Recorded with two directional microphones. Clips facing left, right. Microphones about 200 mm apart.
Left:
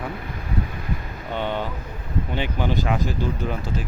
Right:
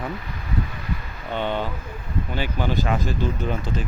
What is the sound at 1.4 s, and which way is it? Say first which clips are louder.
Speech: right 1 dB; 10° left (ahead or behind).